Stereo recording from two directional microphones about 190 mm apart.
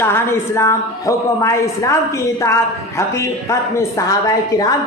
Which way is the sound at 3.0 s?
15° left (ahead or behind).